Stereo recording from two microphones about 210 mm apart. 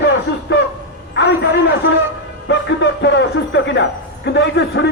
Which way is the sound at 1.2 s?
55° left (ahead or behind).